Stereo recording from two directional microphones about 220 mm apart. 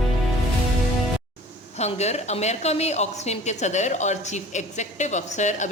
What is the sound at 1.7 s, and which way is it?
A woman's voice, 30° left (ahead or behind).